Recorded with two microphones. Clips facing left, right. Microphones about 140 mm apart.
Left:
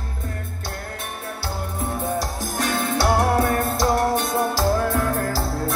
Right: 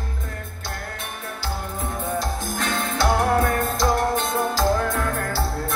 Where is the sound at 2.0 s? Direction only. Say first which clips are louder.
Even; 10° left (ahead or behind).